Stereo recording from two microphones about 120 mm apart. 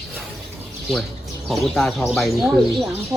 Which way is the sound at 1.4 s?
Centre (ahead or behind).